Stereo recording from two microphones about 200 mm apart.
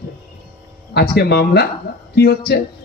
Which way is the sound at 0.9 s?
55° left (ahead or behind).